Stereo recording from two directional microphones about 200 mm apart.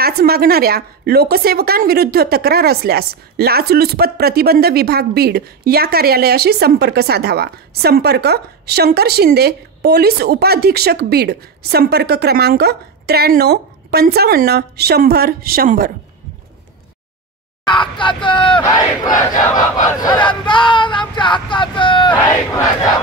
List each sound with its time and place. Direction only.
0.0 s a woman's voice: 50° right (ahead or behind)
17.6 s speech: 25° left (ahead or behind)
19.9 s crowd: 20° left (ahead or behind)
21.1 s vehicle: 25° left (ahead or behind)
22.1 s battle cry: 15° left (ahead or behind)